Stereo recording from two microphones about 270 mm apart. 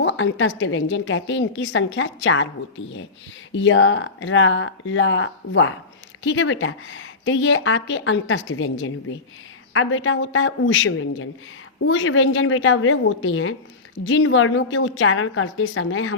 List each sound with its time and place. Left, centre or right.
0.0 s a woman's voice: left